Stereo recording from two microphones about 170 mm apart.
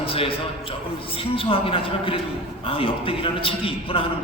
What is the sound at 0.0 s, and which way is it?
A man's voice, 35° left (ahead or behind).